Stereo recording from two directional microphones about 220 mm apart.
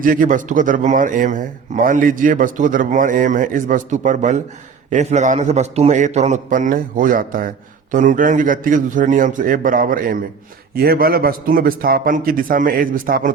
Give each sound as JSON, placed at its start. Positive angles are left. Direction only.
{"t": 0.0, "sound": "a man's voice", "side_deg": -40}